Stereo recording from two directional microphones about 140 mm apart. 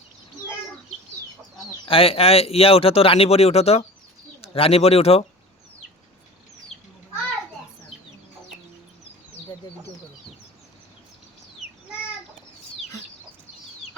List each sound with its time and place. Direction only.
1.9 s speech: 45° left (ahead or behind)